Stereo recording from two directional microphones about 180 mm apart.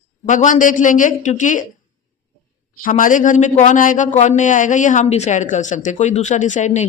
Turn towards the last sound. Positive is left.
turn(degrees=40)  # may be behind; listen again after turning